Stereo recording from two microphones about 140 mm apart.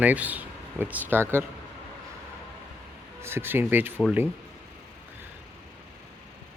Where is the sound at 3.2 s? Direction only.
15° right (ahead or behind).